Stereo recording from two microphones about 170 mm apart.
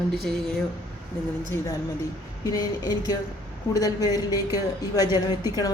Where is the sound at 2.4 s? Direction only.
20° left (ahead or behind).